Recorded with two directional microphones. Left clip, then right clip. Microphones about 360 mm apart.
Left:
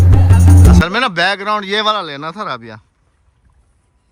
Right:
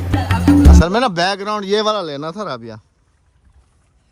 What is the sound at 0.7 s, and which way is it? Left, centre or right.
Speech, centre.